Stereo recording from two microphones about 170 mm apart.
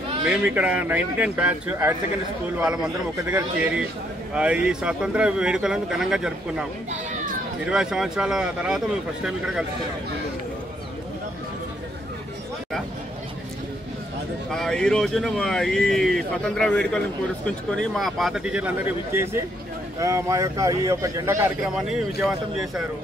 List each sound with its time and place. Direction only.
0.2 s speech: 5° right (ahead or behind)
7.7 s speech: 5° right (ahead or behind)
14.5 s speech: 5° left (ahead or behind); by 21.5 s 15° right (ahead or behind)
21.7 s speech: 5° right (ahead or behind)